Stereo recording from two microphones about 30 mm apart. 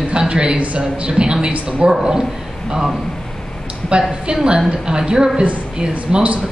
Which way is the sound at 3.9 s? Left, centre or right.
Right.